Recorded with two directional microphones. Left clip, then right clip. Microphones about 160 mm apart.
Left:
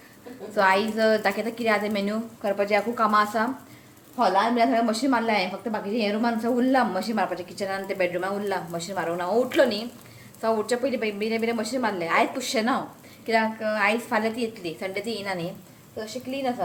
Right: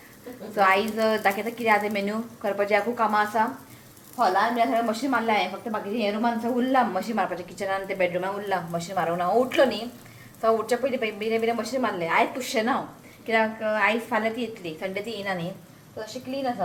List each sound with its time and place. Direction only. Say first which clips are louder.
0.5 s a woman's voice: even; 20° left (ahead or behind)
3.1 s a woman's voice: left 1 dB; 25° left (ahead or behind)